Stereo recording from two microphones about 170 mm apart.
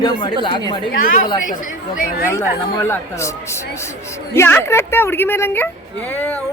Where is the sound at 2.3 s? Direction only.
15° left (ahead or behind).